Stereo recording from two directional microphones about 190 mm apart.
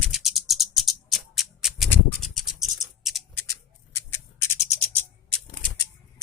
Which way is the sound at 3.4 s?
15° left (ahead or behind).